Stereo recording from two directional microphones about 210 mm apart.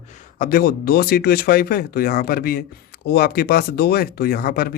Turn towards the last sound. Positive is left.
turn(degrees=45)  # may be behind; listen again after turning